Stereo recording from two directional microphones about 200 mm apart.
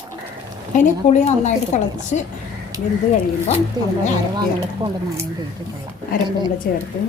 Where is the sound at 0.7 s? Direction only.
35° left (ahead or behind).